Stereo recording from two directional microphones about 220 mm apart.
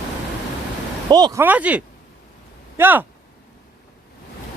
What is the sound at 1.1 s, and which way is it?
Speech, 20° right (ahead or behind).